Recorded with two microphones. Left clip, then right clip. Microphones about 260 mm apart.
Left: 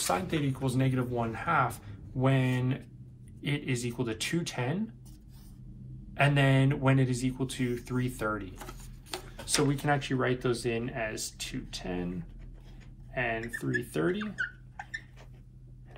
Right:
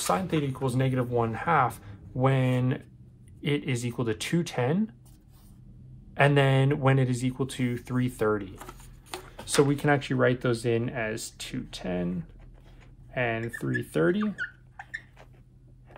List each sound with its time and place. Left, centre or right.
0.0 s speech: right
6.1 s speech: right
9.7 s speech: right
14.3 s a sound: centre